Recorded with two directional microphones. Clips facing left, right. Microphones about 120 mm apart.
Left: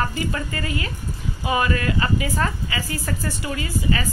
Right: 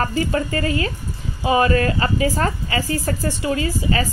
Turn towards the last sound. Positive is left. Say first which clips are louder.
# right 3 dB
turn(degrees=-35)  # may be behind; listen again after turning